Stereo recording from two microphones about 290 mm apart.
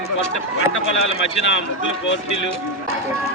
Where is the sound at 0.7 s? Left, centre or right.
Left.